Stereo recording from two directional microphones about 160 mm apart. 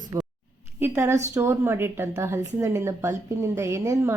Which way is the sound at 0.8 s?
15° right (ahead or behind).